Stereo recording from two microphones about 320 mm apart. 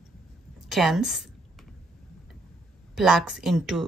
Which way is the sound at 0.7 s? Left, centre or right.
Centre.